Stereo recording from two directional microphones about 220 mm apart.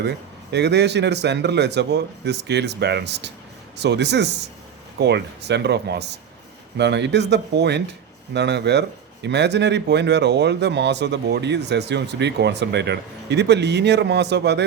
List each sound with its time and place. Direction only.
0.5 s speech: 50° right (ahead or behind)